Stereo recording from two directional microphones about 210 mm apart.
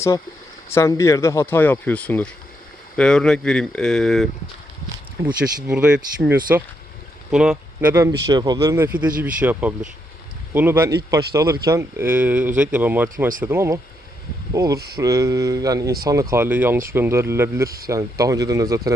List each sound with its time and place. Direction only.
0.7 s speech: 15° left (ahead or behind); by 7.6 s centre (ahead or behind)
7.9 s speech: 15° right (ahead or behind)
17.7 s speech: 45° right (ahead or behind)
17.9 s speech: 15° right (ahead or behind)